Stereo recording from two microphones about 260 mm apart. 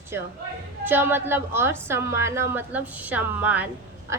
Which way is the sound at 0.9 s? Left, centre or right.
Centre.